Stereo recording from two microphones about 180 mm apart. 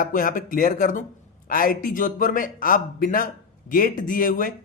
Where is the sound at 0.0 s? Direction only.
50° left (ahead or behind).